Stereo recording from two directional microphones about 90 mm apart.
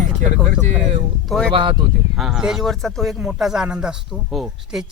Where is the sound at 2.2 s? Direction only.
5° right (ahead or behind).